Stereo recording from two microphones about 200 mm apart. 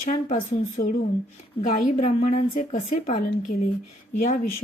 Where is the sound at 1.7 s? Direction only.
40° left (ahead or behind).